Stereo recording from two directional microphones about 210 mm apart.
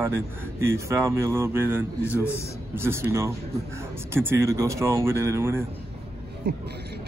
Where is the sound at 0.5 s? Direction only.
10° right (ahead or behind).